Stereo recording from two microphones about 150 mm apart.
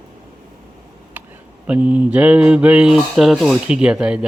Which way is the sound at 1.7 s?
10° right (ahead or behind).